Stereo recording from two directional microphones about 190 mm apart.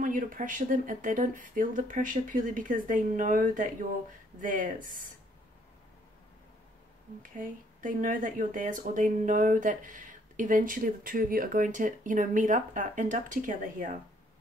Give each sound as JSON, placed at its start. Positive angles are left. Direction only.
{"t": 0.0, "sound": "speech", "side_deg": -45}
{"t": 7.2, "sound": "speech", "side_deg": -45}